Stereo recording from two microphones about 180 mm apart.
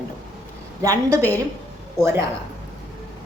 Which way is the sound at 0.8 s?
20° right (ahead or behind).